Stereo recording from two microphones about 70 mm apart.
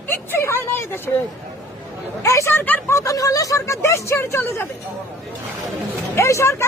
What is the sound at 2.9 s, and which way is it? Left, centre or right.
Speech, left.